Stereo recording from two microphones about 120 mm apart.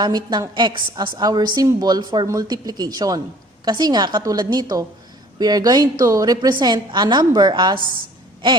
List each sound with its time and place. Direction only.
0.0 s a woman's voice: 35° right (ahead or behind)